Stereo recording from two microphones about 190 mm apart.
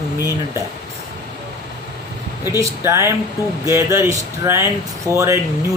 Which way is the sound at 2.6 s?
15° right (ahead or behind).